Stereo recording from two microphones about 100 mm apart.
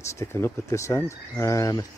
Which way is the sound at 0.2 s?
25° left (ahead or behind).